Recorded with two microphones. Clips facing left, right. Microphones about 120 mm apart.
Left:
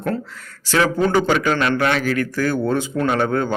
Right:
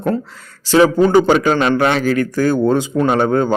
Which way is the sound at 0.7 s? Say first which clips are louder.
Right 6 dB; 20° right (ahead or behind).